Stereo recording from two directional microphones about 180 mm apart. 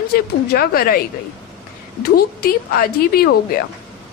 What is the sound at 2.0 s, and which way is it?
A woman's voice, 60° left (ahead or behind).